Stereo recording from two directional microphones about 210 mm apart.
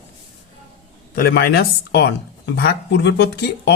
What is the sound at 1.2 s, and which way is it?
Speech, 45° left (ahead or behind).